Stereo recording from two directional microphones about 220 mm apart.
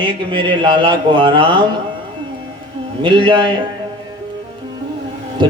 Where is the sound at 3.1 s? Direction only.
20° right (ahead or behind).